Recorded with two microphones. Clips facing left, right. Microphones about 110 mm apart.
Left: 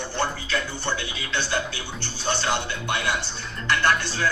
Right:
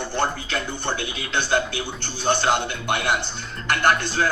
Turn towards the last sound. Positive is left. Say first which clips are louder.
# right 2 dB
turn(degrees=-55)  # may be behind; listen again after turning